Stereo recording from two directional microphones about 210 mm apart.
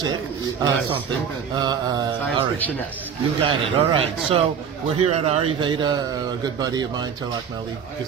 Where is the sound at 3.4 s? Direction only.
30° right (ahead or behind).